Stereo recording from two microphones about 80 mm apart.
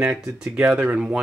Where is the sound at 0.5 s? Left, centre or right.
Centre.